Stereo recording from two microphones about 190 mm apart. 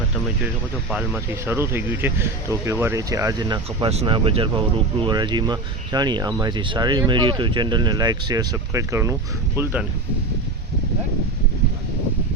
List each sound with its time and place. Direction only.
0.9 s speech: 10° right (ahead or behind)